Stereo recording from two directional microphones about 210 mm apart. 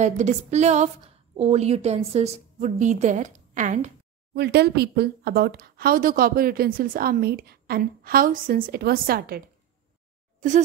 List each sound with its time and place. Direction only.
0.0 s a woman's voice: 35° right (ahead or behind)